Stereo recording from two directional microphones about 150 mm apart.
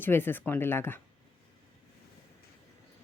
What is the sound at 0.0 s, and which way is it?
Speech, 15° left (ahead or behind).